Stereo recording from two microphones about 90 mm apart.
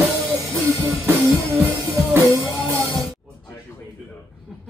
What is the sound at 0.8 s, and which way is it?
Music, 30° right (ahead or behind).